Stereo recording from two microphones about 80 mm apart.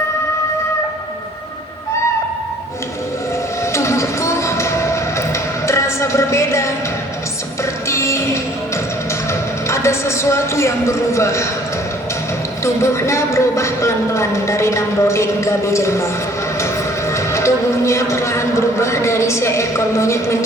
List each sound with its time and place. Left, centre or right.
3.7 s music: left
7.9 s music: left
9.6 s a man's voice: left
12.6 s speech: left
17.1 s speech: left